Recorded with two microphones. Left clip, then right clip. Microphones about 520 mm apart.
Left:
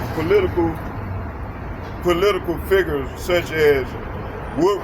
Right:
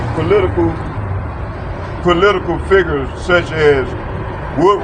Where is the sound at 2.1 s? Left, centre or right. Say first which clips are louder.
Right 6 dB; left.